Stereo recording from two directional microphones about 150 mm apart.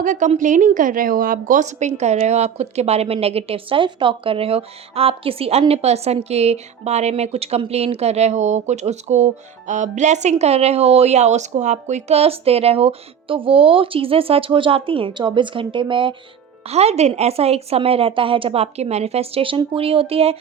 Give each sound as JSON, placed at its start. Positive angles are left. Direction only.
{"t": 0.0, "sound": "a woman's voice", "side_deg": -60}
{"t": 16.6, "sound": "a woman's voice", "side_deg": -45}